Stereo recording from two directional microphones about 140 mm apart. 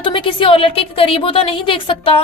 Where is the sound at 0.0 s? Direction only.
35° left (ahead or behind).